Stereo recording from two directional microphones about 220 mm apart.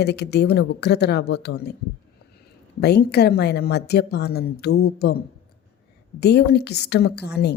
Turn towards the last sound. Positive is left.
turn(degrees=50)  # may be behind; listen again after turning